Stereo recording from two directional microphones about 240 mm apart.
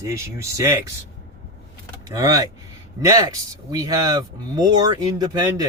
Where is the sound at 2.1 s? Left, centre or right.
Centre.